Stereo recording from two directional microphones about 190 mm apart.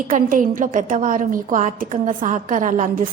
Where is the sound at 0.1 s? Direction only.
45° right (ahead or behind).